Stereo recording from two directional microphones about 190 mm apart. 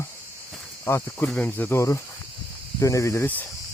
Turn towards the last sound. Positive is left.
turn(degrees=10)  # may be behind; listen again after turning